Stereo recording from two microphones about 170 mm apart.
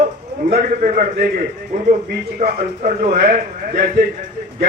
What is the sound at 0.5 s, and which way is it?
Speech, 55° right (ahead or behind).